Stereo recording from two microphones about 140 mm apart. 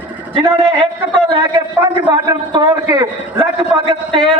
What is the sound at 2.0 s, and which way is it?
A man's voice, 35° right (ahead or behind).